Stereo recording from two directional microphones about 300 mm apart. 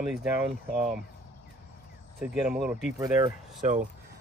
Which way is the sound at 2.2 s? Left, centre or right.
Centre.